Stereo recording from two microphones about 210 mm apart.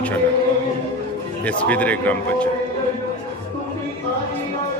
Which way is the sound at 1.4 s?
5° left (ahead or behind).